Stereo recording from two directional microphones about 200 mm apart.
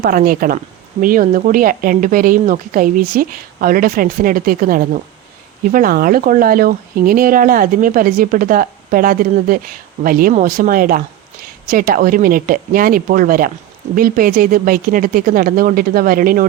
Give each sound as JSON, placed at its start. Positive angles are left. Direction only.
{"t": 0.0, "sound": "a woman's voice", "side_deg": -45}